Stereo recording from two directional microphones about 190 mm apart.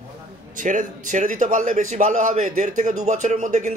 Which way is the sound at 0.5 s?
45° right (ahead or behind).